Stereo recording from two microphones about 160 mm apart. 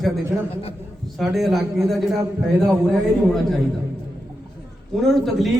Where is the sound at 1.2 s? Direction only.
Centre (ahead or behind).